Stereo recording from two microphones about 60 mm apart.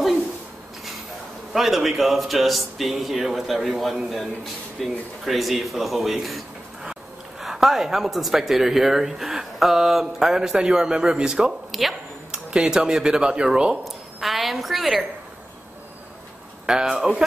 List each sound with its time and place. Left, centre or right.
1.5 s speech: centre
6.8 s dog: centre
7.4 s speech: centre
11.7 s speech: centre
12.3 s speech: centre
13.8 s a woman's voice: centre
16.6 s speech: centre